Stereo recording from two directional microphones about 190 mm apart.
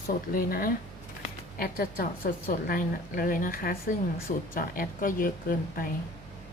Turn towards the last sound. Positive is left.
turn(degrees=50)  # may be behind; listen again after turning